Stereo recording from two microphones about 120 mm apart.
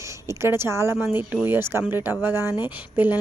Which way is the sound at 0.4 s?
20° right (ahead or behind).